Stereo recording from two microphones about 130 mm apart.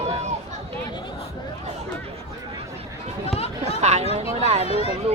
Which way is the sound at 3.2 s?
50° left (ahead or behind).